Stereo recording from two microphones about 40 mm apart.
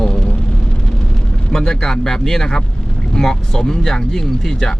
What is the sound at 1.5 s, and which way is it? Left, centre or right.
Speech, centre.